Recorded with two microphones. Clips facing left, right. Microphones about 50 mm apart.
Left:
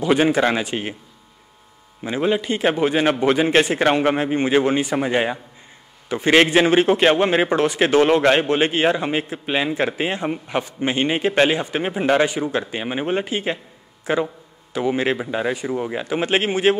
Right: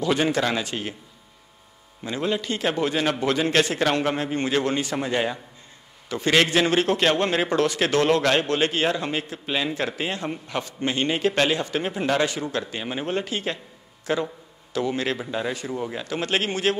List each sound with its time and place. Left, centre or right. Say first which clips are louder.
0.0 s a man's voice: left 5 dB; left
2.0 s a man's voice: left 5 dB; left